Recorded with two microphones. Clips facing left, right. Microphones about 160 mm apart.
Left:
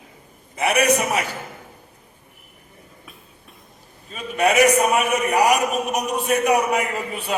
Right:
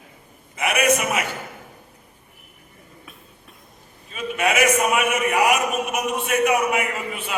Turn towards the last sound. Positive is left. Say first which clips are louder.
# left 2 dB
turn(degrees=35)  # may be behind; listen again after turning